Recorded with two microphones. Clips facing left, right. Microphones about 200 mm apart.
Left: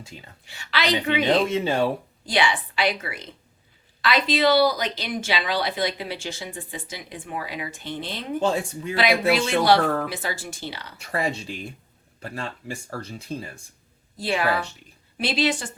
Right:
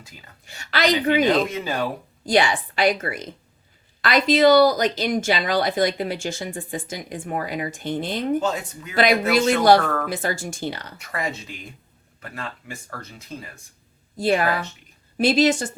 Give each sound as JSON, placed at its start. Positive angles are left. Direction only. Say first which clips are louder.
{"t": 0.0, "sound": "a woman's voice", "louder": "left 5 dB", "side_deg": 25}
{"t": 0.4, "sound": "speech", "louder": "right 4 dB", "side_deg": -45}
{"t": 1.5, "sound": "speech", "louder": "left 4 dB", "side_deg": 25}
{"t": 2.2, "sound": "speech", "louder": "right 4 dB", "side_deg": -45}
{"t": 8.4, "sound": "speech", "louder": "left 1 dB", "side_deg": 30}
{"t": 9.0, "sound": "speech", "louder": "right 3 dB", "side_deg": -45}
{"t": 11.0, "sound": "speech", "louder": "left 3 dB", "side_deg": 30}
{"t": 14.2, "sound": "speech", "louder": "right 3 dB", "side_deg": -45}